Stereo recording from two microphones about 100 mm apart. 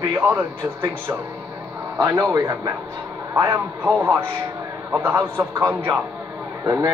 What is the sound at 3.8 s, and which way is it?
A man's voice, 15° right (ahead or behind).